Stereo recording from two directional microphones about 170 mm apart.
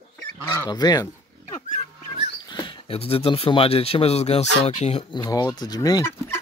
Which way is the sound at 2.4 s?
25° left (ahead or behind).